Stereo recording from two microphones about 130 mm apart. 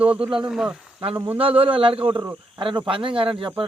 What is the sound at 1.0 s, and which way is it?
Speech, 40° right (ahead or behind).